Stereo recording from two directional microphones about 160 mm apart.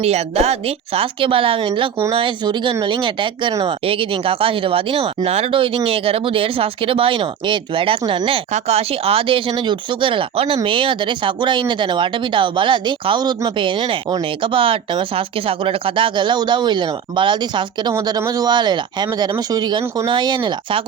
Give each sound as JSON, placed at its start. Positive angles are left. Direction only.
{"t": 0.0, "sound": "speech", "side_deg": -40}